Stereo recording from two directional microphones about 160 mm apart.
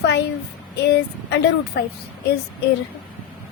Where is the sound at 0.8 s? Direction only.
90° left.